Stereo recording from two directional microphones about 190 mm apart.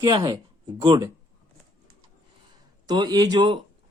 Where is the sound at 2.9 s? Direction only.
20° right (ahead or behind).